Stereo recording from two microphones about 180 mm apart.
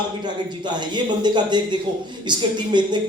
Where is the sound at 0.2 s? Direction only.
25° right (ahead or behind).